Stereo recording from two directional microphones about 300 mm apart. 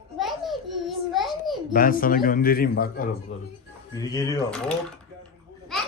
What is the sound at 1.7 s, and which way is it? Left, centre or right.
A man's voice, left.